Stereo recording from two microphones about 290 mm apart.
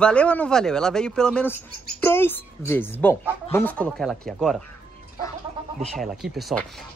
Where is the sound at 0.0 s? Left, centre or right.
Centre.